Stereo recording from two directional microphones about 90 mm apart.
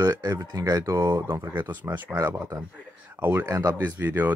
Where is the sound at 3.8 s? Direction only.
20° right (ahead or behind).